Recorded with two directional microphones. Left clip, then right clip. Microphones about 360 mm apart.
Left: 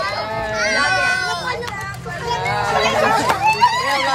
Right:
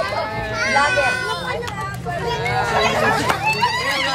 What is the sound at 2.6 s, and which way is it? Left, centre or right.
Chatter, centre.